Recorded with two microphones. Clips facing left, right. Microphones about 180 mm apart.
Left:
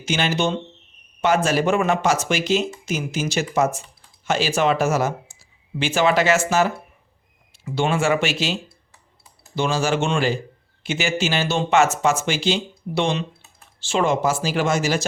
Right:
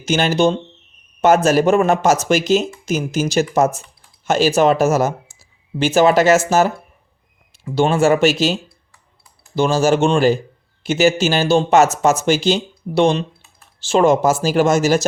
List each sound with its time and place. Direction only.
0.0 s speech: 40° right (ahead or behind)
9.6 s speech: 40° right (ahead or behind)